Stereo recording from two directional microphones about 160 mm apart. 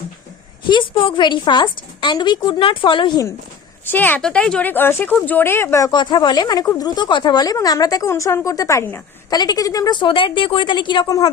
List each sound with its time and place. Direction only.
0.7 s speech: 30° left (ahead or behind)
3.8 s speech: 10° left (ahead or behind)